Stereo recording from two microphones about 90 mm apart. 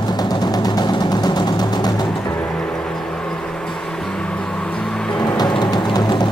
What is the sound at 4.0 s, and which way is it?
Vehicle, 10° left (ahead or behind).